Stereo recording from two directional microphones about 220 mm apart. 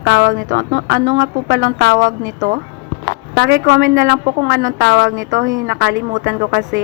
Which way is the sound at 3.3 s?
45° right (ahead or behind).